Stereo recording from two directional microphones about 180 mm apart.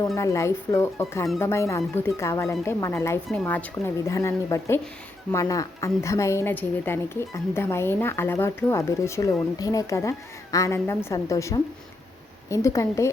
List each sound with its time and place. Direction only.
0.2 s speech: 15° left (ahead or behind)